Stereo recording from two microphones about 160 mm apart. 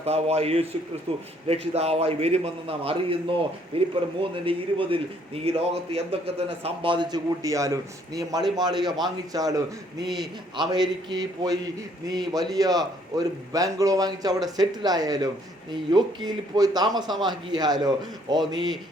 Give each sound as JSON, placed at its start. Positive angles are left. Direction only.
{"t": 0.0, "sound": "a man's voice", "side_deg": -40}
{"t": 10.0, "sound": "a man's voice", "side_deg": 0}
{"t": 10.6, "sound": "a man's voice", "side_deg": -25}